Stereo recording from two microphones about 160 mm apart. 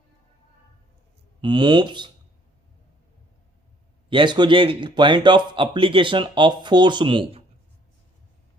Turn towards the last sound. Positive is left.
turn(degrees=-30)  # may be behind; listen again after turning